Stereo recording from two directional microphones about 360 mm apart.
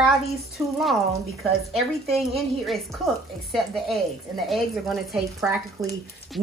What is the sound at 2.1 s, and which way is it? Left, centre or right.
Speech, centre.